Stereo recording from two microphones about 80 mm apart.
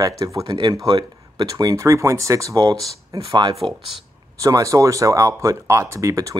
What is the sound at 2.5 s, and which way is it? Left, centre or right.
Speech, right.